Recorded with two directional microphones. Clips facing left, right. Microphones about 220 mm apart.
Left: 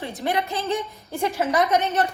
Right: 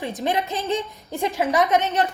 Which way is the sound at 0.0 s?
20° right (ahead or behind).